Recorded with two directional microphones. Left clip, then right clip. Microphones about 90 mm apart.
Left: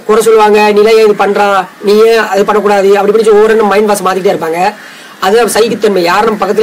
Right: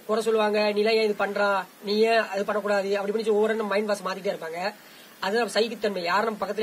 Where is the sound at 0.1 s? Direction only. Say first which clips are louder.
Left 18 dB; 25° left (ahead or behind).